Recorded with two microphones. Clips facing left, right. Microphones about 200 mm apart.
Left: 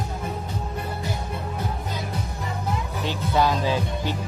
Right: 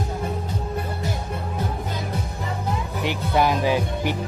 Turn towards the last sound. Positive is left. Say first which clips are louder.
# right 3 dB
turn(degrees=-15)  # may be behind; listen again after turning